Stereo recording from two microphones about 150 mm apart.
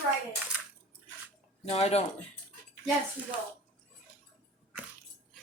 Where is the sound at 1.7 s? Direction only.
45° left (ahead or behind).